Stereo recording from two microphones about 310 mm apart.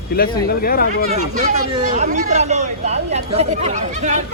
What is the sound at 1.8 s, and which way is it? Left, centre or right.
Speech, right.